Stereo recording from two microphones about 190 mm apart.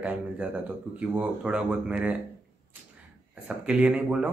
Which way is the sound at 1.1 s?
5° right (ahead or behind).